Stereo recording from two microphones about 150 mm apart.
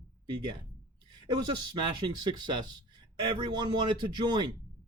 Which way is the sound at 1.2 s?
30° right (ahead or behind).